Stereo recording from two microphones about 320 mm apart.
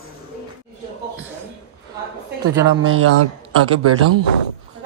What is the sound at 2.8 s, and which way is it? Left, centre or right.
A man's voice, right.